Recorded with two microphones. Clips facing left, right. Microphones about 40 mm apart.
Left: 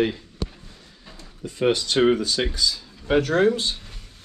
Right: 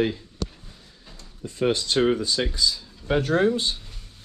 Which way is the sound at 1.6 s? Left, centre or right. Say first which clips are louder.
Left 2 dB; left.